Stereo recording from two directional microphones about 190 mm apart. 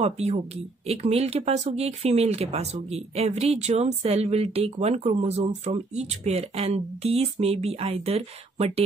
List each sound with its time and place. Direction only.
0.0 s speech: 35° right (ahead or behind)